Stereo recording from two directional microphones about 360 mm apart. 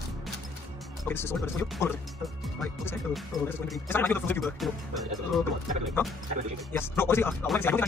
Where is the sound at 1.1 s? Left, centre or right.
Centre.